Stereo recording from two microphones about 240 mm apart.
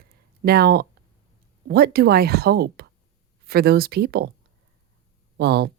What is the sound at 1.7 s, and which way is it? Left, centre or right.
Speech, right.